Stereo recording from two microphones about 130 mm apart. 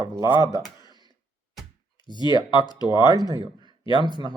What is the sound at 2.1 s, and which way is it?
Speech, 35° left (ahead or behind).